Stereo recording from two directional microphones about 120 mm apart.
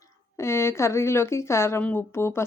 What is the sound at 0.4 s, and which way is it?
A woman's voice, 20° left (ahead or behind).